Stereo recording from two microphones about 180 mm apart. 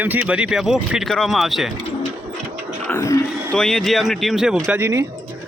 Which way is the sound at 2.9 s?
15° left (ahead or behind).